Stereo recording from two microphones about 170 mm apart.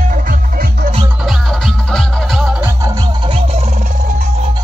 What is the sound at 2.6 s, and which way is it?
Music, 20° right (ahead or behind).